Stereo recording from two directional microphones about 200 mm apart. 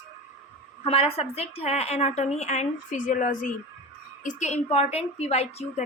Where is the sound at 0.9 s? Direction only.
30° left (ahead or behind).